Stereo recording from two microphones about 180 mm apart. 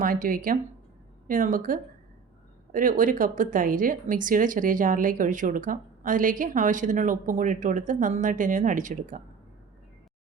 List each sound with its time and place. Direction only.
0.0 s speech: 50° right (ahead or behind)